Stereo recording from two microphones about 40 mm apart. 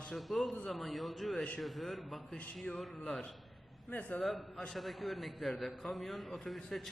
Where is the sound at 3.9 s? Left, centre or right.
Left.